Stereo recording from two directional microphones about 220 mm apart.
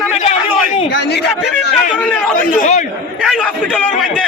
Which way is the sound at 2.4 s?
35° left (ahead or behind).